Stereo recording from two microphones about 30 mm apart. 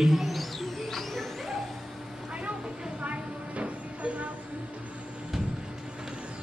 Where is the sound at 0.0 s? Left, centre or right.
Centre.